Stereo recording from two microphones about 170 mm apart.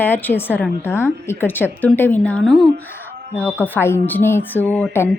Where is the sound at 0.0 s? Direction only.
10° left (ahead or behind).